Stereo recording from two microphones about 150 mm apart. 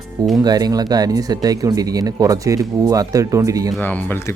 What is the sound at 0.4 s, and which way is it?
Speech, 25° right (ahead or behind).